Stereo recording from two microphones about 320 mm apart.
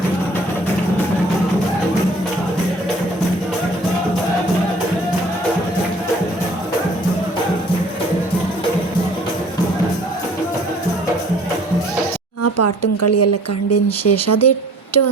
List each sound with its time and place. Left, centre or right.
12.4 s speech: left